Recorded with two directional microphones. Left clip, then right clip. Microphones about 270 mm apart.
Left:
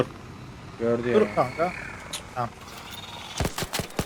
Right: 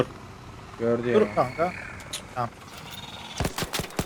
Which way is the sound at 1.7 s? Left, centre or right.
Centre.